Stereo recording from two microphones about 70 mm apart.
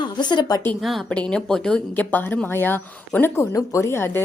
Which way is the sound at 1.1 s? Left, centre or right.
Centre.